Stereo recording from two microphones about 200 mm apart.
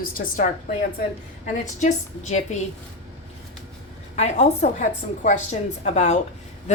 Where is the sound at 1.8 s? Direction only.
35° left (ahead or behind).